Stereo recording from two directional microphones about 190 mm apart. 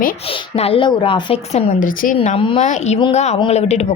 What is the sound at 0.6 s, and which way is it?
A woman's voice, 30° left (ahead or behind).